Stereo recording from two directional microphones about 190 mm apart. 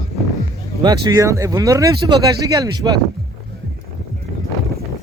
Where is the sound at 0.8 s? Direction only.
20° right (ahead or behind).